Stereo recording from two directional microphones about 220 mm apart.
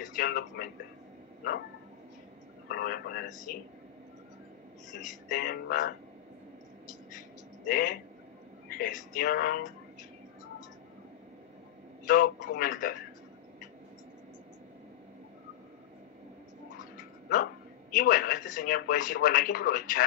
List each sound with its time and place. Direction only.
0.0 s speech: 40° left (ahead or behind)
2.7 s speech: 45° left (ahead or behind)
5.0 s speech: 35° left (ahead or behind)
7.6 s speech: 40° left (ahead or behind)
12.1 s speech: 40° left (ahead or behind)
17.9 s speech: 40° left (ahead or behind)